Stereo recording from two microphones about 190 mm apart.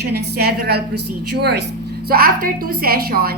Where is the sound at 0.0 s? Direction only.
55° right (ahead or behind).